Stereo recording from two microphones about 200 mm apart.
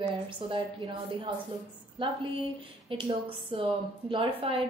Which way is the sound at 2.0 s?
25° right (ahead or behind).